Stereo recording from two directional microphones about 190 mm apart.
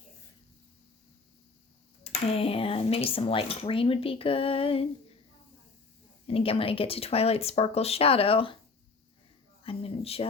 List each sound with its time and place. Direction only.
2.0 s speech: 30° left (ahead or behind)
6.2 s speech: 30° left (ahead or behind)
9.6 s a sound: 30° left (ahead or behind)